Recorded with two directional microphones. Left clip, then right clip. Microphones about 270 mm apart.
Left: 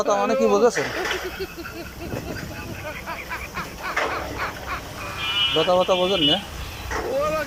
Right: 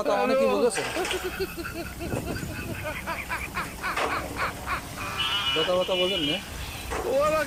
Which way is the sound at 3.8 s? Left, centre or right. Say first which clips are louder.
Left 3 dB; centre.